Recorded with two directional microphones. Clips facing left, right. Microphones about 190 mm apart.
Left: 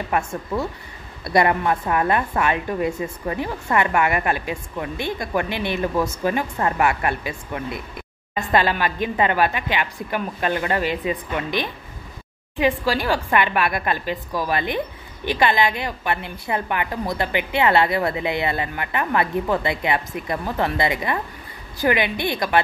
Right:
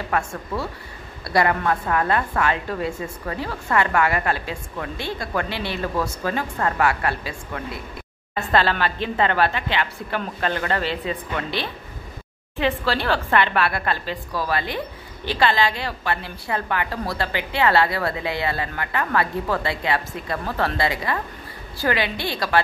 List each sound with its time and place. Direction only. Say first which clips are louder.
0.1 s a woman's voice: left 2 dB; 20° left (ahead or behind)